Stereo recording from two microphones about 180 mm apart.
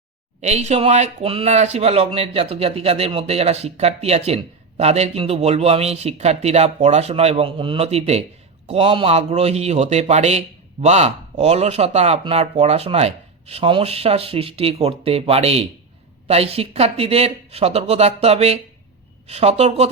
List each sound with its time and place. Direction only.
0.4 s a man's voice: 40° right (ahead or behind)